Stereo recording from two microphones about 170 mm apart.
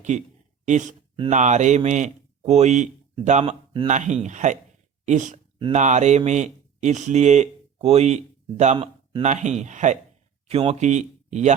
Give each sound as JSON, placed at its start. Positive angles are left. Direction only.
{"t": 0.1, "sound": "speech", "side_deg": -45}